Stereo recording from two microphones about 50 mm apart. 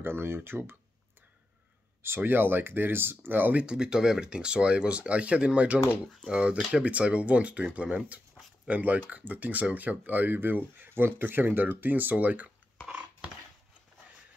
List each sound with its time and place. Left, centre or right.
0.0 s speech: right
2.0 s speech: right
3.5 s speech: centre; by 12.4 s right